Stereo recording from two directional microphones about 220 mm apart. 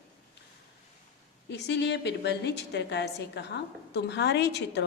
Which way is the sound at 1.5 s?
50° left (ahead or behind).